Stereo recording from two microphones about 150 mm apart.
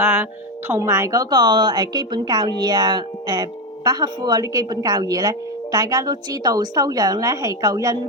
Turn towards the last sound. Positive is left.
turn(degrees=-25)  # may be behind; listen again after turning